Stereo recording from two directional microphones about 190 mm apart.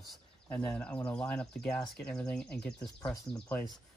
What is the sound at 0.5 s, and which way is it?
Speech, 5° left (ahead or behind).